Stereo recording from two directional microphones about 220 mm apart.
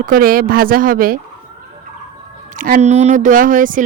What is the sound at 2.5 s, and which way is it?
Speech, 40° right (ahead or behind).